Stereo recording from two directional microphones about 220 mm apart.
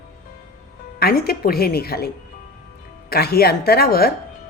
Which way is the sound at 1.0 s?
45° left (ahead or behind).